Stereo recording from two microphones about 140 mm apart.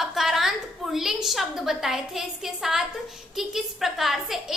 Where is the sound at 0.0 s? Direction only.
Centre (ahead or behind).